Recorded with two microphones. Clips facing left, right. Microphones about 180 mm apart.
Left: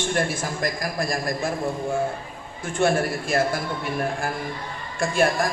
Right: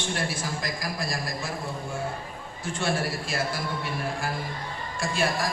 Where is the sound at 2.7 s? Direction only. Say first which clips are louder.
Left 7 dB; 50° left (ahead or behind).